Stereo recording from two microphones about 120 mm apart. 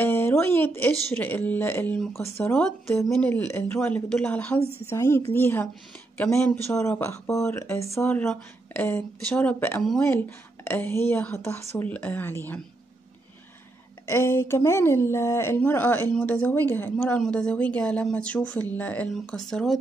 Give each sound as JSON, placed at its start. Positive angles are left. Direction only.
{"t": 0.0, "sound": "speech", "side_deg": 20}
{"t": 14.0, "sound": "speech", "side_deg": 20}
{"t": 17.2, "sound": "speech", "side_deg": 5}